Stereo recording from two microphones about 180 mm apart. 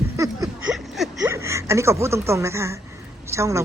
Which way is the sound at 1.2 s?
15° right (ahead or behind).